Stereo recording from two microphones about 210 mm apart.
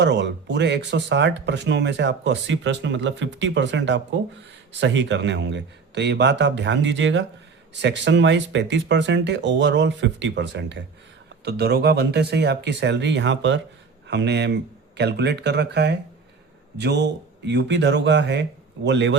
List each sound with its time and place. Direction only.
0.0 s speech: 55° right (ahead or behind)